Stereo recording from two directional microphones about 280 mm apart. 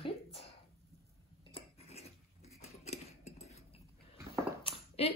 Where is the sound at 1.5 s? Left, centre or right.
Left.